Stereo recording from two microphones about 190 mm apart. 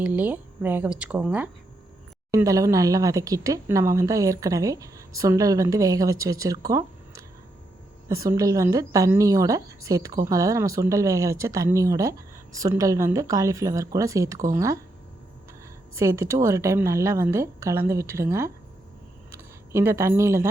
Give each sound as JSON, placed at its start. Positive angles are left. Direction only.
{"t": 0.0, "sound": "speech", "side_deg": -10}
{"t": 16.0, "sound": "speech", "side_deg": -15}